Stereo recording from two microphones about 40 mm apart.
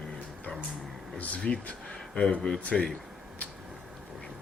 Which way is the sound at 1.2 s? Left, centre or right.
Left.